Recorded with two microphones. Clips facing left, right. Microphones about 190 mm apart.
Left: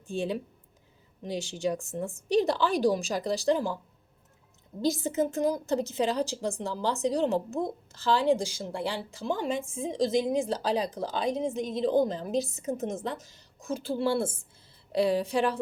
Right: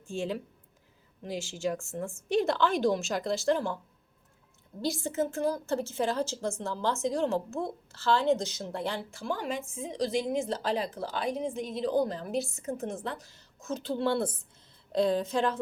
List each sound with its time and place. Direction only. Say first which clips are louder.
0.1 s a woman's voice: left 2 dB; 15° left (ahead or behind)
4.8 s a woman's voice: left 3 dB; 20° left (ahead or behind)
10.2 s a woman's voice: left 2 dB; 15° left (ahead or behind)